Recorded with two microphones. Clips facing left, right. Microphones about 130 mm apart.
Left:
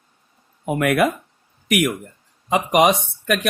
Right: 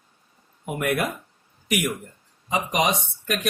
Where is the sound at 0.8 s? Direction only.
90° left.